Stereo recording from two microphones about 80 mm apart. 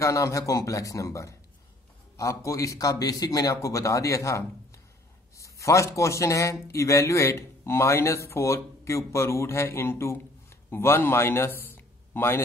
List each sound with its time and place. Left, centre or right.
0.0 s a man's voice: left